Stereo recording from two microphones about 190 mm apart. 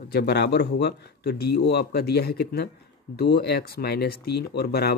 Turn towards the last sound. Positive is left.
turn(degrees=55)  # may be behind; listen again after turning